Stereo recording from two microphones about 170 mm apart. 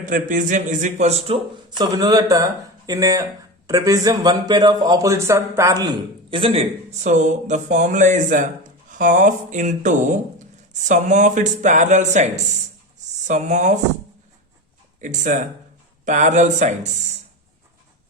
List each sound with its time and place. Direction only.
0.0 s a man's voice: 50° right (ahead or behind)
1.8 s a man's voice: 25° right (ahead or behind); by 13.7 s 45° right (ahead or behind)
15.0 s a man's voice: 50° right (ahead or behind)